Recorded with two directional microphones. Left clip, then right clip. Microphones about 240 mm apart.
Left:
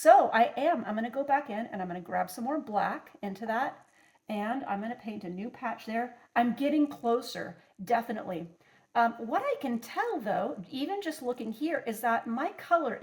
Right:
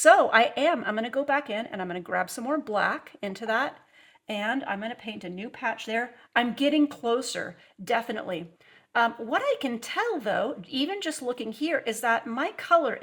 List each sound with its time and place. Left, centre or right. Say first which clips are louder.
0.0 s a woman's voice: right 3 dB; right